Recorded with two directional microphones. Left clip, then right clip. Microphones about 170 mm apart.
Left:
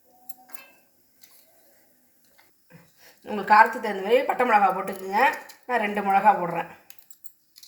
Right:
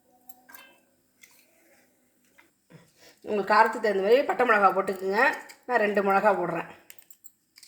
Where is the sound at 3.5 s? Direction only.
55° right (ahead or behind).